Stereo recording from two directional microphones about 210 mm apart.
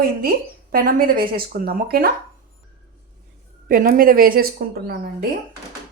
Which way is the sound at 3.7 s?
40° right (ahead or behind).